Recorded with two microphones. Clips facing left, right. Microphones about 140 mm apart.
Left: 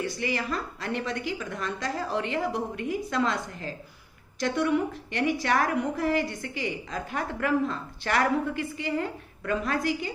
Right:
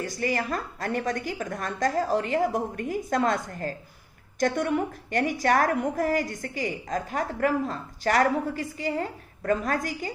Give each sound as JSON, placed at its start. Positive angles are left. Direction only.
{"t": 0.0, "sound": "a woman's voice", "side_deg": -45}